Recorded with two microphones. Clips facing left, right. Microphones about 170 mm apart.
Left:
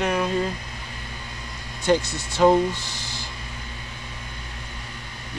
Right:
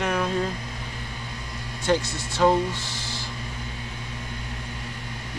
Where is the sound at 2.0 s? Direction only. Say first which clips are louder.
Even; 10° right (ahead or behind).